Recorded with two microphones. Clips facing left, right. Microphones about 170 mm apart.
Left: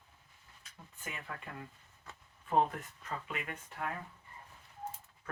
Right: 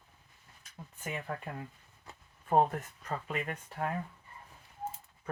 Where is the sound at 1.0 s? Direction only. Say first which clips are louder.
Right 7 dB; 40° right (ahead or behind).